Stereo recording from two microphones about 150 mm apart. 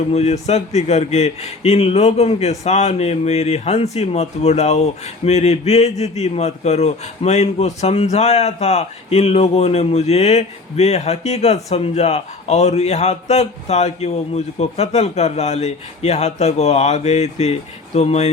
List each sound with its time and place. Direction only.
0.1 s a man's voice: 45° left (ahead or behind)